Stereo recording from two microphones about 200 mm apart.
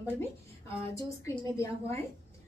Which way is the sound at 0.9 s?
15° left (ahead or behind).